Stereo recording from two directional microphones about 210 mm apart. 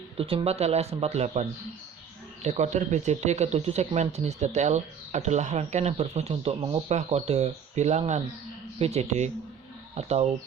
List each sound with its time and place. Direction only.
0.2 s speech: 25° right (ahead or behind)